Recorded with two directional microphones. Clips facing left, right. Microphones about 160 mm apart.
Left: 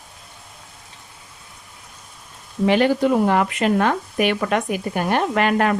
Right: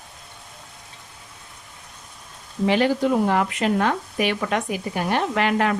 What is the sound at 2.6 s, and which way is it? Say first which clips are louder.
Speech: left 3 dB; 55° left (ahead or behind).